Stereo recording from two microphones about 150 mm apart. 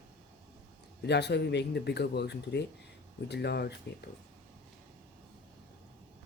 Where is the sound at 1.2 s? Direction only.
90° left.